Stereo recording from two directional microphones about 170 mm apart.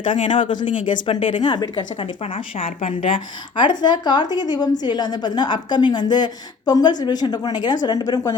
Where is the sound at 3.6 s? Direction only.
25° left (ahead or behind).